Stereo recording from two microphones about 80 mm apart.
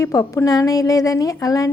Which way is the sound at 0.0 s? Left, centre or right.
Left.